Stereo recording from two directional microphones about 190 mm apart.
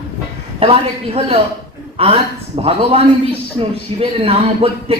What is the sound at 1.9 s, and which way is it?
Speech, 30° right (ahead or behind).